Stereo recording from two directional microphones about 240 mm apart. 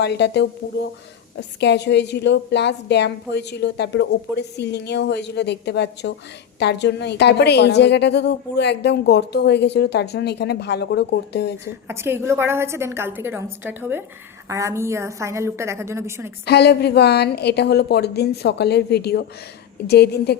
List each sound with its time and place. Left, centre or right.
0.0 s a woman's voice: left
11.9 s a woman's voice: centre
16.5 s a woman's voice: left